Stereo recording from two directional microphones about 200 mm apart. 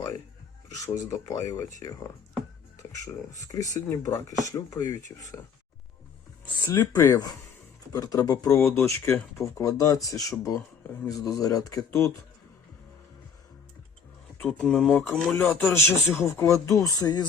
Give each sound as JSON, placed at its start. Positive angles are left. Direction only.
{"t": 0.7, "sound": "speech", "side_deg": 15}
{"t": 3.0, "sound": "speech", "side_deg": 15}
{"t": 6.7, "sound": "speech", "side_deg": 15}
{"t": 14.4, "sound": "speech", "side_deg": 0}